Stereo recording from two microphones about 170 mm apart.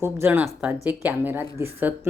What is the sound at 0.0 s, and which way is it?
Speech, 15° right (ahead or behind).